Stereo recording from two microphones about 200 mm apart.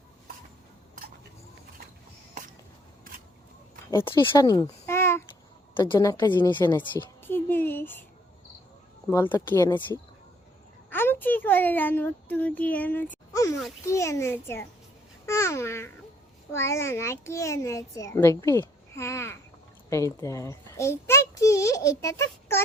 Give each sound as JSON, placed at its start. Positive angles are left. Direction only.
{"t": 4.0, "sound": "a child's voice", "side_deg": 25}
{"t": 7.2, "sound": "a sound", "side_deg": 10}
{"t": 9.0, "sound": "a child's voice", "side_deg": 10}
{"t": 10.8, "sound": "a child's voice", "side_deg": 10}